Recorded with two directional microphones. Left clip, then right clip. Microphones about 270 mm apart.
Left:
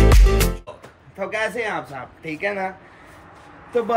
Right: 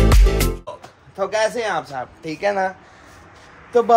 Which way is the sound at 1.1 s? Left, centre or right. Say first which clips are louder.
Right 4 dB; centre.